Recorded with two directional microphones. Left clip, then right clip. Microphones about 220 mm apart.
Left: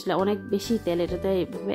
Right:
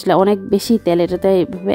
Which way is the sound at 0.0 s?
45° right (ahead or behind).